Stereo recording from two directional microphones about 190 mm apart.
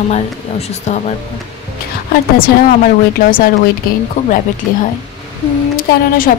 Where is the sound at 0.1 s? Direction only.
35° left (ahead or behind).